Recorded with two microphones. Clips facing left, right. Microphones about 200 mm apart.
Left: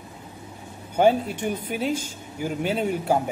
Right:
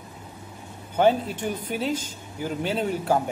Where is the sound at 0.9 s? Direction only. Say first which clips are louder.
Left 1 dB; 10° left (ahead or behind).